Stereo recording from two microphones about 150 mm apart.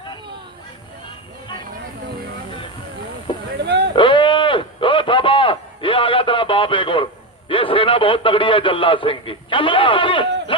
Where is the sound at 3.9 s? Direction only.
35° left (ahead or behind).